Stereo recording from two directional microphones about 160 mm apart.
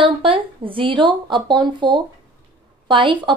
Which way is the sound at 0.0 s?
35° right (ahead or behind).